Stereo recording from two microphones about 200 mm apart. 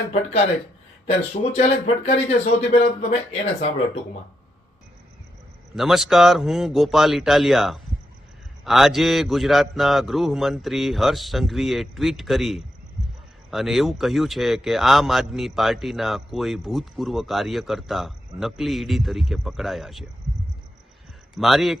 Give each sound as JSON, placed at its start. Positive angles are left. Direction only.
{"t": 0.1, "sound": "speech", "side_deg": 30}
{"t": 5.7, "sound": "speech", "side_deg": 0}
{"t": 21.3, "sound": "speech", "side_deg": 0}